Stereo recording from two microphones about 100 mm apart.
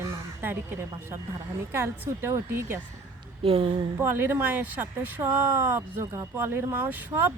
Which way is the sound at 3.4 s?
70° right (ahead or behind).